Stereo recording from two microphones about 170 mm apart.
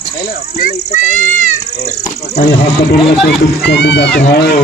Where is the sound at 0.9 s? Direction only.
45° left (ahead or behind).